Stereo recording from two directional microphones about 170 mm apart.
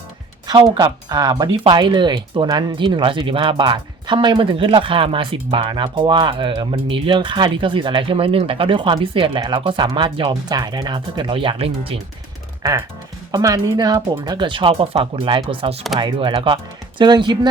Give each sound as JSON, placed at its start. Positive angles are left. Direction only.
{"t": 0.4, "sound": "speech", "side_deg": -25}
{"t": 13.3, "sound": "speech", "side_deg": -20}